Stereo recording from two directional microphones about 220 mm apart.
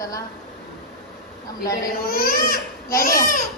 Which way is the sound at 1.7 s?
40° left (ahead or behind).